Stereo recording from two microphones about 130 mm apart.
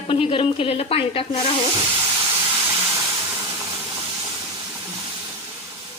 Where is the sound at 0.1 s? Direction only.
45° left (ahead or behind).